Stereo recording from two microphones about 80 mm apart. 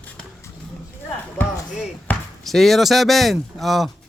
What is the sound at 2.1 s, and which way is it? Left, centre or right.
Basketball bounce, centre.